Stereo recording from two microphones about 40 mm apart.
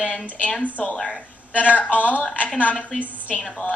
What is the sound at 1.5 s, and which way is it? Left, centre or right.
Speech, left.